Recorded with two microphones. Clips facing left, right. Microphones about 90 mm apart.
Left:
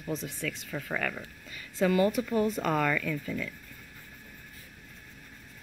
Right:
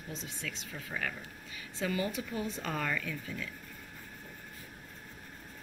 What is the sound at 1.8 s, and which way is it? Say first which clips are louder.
Speech: left 9 dB; 70° left (ahead or behind).